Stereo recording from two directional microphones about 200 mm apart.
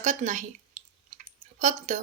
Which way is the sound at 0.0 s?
35° right (ahead or behind).